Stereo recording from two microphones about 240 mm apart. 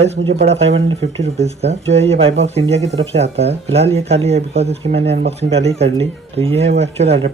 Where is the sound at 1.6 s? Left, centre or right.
Right.